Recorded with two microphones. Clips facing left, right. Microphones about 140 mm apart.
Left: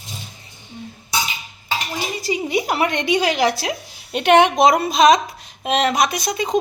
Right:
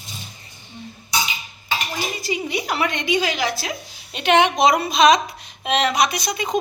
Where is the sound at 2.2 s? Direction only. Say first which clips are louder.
Left 7 dB; 45° left (ahead or behind).